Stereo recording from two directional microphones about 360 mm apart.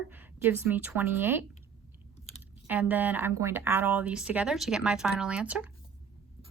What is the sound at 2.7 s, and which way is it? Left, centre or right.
Speech, centre.